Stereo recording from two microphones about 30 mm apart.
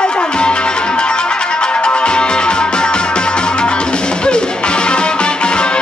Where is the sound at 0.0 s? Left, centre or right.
Left.